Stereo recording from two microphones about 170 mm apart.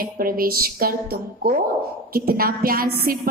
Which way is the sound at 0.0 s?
55° right (ahead or behind).